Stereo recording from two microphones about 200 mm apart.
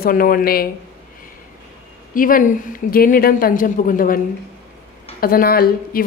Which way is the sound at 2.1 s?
45° left (ahead or behind).